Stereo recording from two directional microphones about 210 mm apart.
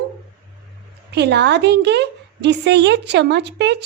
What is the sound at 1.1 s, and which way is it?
A woman's voice, 55° right (ahead or behind).